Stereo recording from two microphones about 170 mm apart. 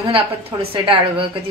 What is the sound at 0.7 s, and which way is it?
Speech, 30° right (ahead or behind).